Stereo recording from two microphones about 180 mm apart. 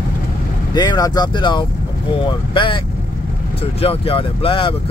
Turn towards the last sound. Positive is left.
turn(degrees=30)  # may be behind; listen again after turning